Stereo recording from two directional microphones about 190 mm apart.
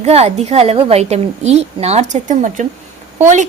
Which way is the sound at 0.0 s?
35° right (ahead or behind).